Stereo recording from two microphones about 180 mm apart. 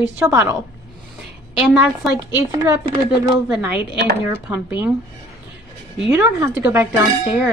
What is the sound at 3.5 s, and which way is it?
A woman's voice, 10° right (ahead or behind).